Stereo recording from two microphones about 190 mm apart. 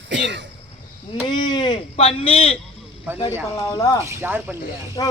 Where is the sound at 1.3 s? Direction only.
25° left (ahead or behind).